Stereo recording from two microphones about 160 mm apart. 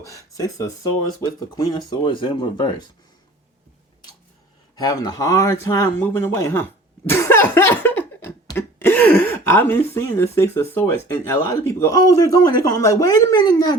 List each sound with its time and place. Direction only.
0.0 s speech: 20° left (ahead or behind)
4.7 s speech: 25° left (ahead or behind)